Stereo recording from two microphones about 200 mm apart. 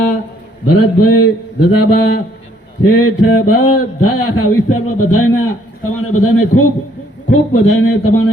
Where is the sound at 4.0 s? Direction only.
90° left.